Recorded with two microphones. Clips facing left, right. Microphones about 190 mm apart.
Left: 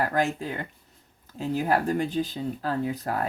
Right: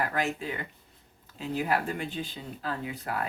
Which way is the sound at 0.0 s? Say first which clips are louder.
Left 4 dB; 40° left (ahead or behind).